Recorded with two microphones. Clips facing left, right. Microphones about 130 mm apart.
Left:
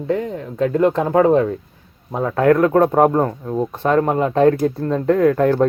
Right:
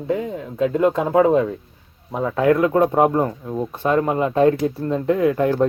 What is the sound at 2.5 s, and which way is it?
Speech, 50° left (ahead or behind).